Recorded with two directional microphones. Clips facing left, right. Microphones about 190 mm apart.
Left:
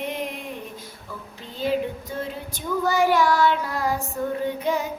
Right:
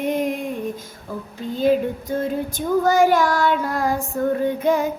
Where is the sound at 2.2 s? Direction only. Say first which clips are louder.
Right 7 dB; 50° right (ahead or behind).